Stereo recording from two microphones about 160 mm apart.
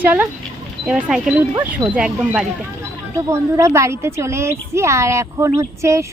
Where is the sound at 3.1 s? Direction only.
20° right (ahead or behind).